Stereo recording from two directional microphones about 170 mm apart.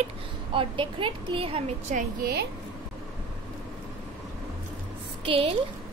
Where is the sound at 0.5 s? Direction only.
30° right (ahead or behind).